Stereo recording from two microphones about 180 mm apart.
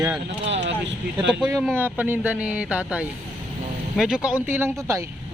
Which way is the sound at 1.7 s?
10° right (ahead or behind).